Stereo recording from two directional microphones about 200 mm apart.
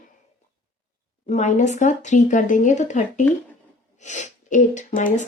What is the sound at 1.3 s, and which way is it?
Speech, 35° left (ahead or behind).